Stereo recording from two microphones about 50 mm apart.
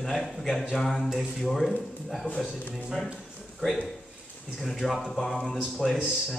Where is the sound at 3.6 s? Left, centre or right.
Left.